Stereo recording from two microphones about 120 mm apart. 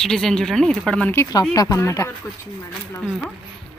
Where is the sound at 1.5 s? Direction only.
25° left (ahead or behind).